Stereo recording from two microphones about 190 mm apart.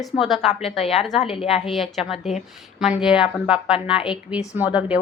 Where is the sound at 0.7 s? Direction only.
Centre (ahead or behind).